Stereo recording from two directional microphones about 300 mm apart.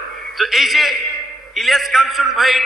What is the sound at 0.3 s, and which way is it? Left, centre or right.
A man's voice, centre.